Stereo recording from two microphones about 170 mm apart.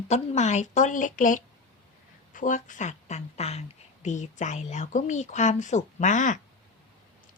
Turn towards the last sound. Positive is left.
turn(degrees=45)  # may be behind; listen again after turning